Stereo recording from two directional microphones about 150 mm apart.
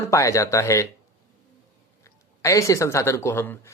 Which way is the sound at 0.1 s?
20° left (ahead or behind).